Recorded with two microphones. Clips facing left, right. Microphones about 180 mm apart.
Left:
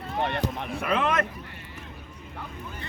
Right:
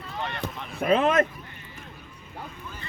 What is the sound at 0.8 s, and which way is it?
Speech, 40° right (ahead or behind).